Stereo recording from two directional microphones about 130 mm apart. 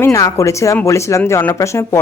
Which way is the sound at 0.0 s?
25° left (ahead or behind).